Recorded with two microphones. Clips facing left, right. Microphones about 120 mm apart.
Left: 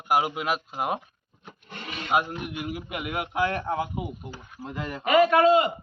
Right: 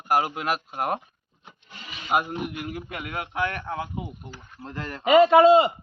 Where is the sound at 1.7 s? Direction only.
55° left (ahead or behind).